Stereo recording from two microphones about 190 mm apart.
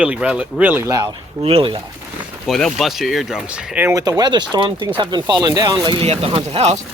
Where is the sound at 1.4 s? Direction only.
30° right (ahead or behind).